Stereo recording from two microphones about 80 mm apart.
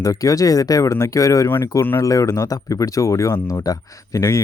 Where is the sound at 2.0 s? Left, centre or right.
Left.